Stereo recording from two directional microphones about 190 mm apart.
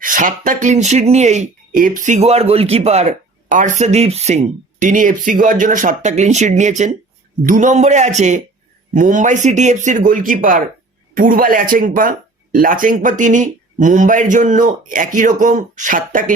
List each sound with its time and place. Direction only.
0.0 s speech: 45° right (ahead or behind)